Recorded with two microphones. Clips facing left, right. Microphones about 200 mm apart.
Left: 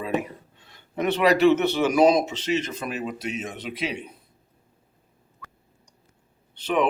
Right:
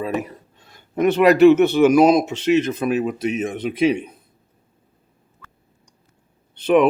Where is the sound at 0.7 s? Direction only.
45° right (ahead or behind).